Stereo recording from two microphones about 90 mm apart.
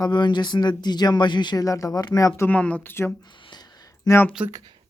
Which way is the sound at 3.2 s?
60° left (ahead or behind).